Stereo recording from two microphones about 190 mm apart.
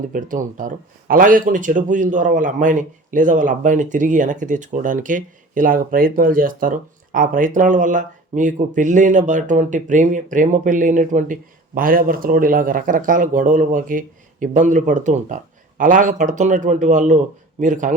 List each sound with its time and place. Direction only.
0.1 s speech: 45° right (ahead or behind)